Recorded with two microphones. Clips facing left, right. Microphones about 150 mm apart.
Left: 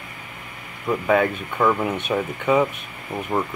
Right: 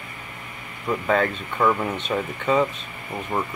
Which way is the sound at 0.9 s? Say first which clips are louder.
Left 2 dB; 10° left (ahead or behind).